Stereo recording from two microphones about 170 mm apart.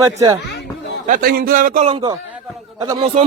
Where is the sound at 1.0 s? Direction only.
60° right (ahead or behind).